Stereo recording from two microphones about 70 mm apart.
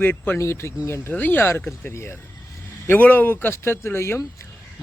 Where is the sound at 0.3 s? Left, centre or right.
Left.